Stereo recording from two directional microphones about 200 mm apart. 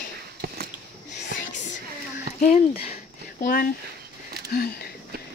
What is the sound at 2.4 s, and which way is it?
Speech, 30° left (ahead or behind).